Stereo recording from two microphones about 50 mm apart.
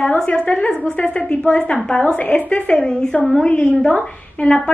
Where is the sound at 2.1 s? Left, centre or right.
Left.